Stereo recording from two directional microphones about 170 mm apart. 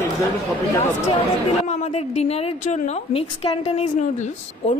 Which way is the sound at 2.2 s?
40° left (ahead or behind).